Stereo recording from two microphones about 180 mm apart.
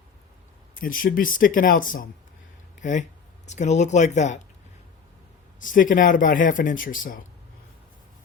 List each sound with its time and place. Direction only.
0.8 s speech: 50° left (ahead or behind)
5.5 s speech: 50° left (ahead or behind)